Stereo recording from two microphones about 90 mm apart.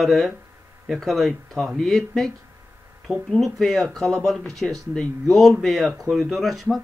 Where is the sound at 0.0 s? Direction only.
Centre (ahead or behind).